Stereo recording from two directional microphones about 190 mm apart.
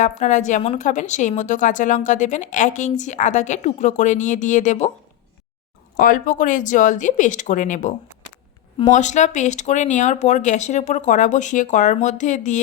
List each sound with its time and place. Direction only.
0.0 s speech: 40° left (ahead or behind)
6.0 s speech: 45° left (ahead or behind)